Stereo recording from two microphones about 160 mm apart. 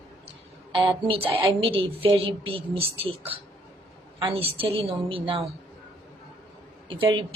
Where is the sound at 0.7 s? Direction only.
35° right (ahead or behind).